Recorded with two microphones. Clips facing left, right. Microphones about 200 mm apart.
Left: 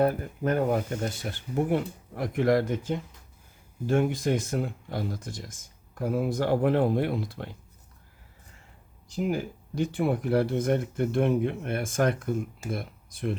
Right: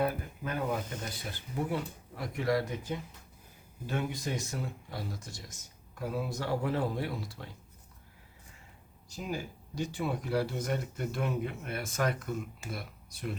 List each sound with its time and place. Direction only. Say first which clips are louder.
0.0 s speech: left 7 dB; 45° left (ahead or behind)
3.8 s speech: left 10 dB; 50° left (ahead or behind)
9.1 s speech: left 9 dB; 55° left (ahead or behind)